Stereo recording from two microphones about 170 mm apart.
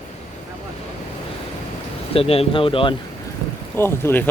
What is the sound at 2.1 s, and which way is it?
Speech, 35° left (ahead or behind).